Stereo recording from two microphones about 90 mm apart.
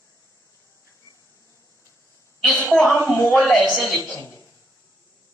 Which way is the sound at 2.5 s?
20° left (ahead or behind).